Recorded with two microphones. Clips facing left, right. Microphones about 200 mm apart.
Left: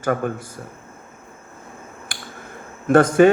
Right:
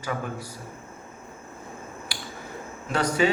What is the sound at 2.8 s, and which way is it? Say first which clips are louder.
Speech: left 11 dB; 50° left (ahead or behind).